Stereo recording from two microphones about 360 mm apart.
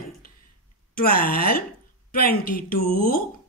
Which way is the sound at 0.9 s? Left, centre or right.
Left.